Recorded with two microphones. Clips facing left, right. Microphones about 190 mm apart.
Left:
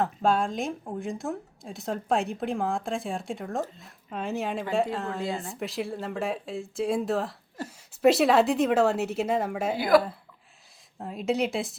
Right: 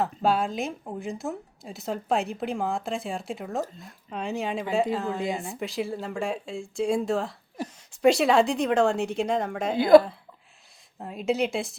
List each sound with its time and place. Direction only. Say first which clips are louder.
0.0 s a woman's voice: even; 5° right (ahead or behind)
5.2 s a woman's voice: right 2 dB; 15° right (ahead or behind)
5.5 s a woman's voice: right 1 dB; centre (ahead or behind)
9.7 s speech: right 6 dB; 25° right (ahead or behind)
11.0 s a woman's voice: right 1 dB; centre (ahead or behind)